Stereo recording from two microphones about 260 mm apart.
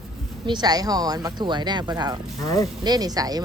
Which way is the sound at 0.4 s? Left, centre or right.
Centre.